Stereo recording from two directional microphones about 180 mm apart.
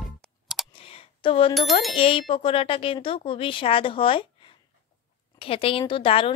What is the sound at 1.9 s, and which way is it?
A woman's voice, 30° left (ahead or behind).